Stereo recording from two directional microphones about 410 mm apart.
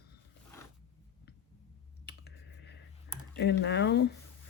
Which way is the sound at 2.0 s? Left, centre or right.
Left.